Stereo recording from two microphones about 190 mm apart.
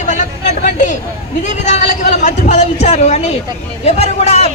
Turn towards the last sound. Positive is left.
turn(degrees=35)  # may be behind; listen again after turning